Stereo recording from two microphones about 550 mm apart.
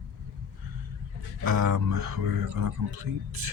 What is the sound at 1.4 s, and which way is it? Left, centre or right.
Speech, right.